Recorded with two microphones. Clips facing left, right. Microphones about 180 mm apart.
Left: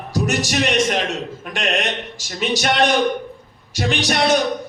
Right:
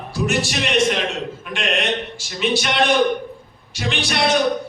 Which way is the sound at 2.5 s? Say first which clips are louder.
Left 1 dB; 40° left (ahead or behind).